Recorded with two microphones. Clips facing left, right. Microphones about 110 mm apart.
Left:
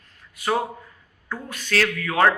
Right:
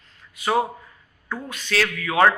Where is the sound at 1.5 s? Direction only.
45° left (ahead or behind).